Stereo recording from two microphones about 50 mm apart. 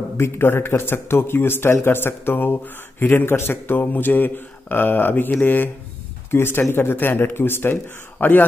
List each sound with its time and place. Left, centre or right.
0.2 s a man's voice: left
6.3 s a man's voice: left